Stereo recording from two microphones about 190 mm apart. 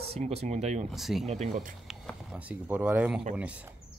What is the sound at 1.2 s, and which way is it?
Speech, 35° right (ahead or behind).